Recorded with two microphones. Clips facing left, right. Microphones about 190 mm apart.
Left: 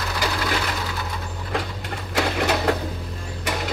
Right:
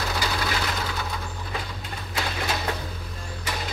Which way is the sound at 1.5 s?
75° left (ahead or behind).